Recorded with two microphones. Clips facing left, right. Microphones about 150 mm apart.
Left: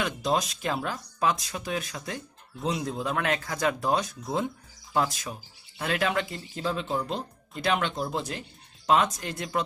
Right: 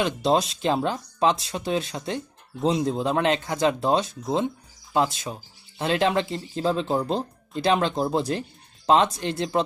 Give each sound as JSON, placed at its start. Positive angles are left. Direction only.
{"t": 0.0, "sound": "speech", "side_deg": -30}